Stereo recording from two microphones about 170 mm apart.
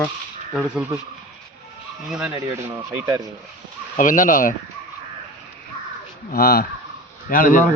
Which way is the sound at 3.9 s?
50° left (ahead or behind).